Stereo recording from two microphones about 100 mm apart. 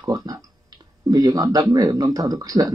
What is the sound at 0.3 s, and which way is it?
Speech, 35° right (ahead or behind).